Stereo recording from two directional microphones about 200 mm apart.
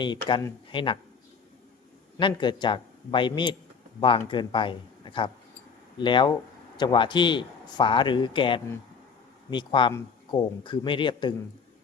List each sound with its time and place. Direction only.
0.0 s speech: 25° left (ahead or behind)
2.1 s speech: 25° left (ahead or behind)